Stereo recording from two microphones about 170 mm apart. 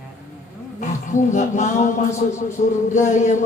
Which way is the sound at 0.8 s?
45° left (ahead or behind).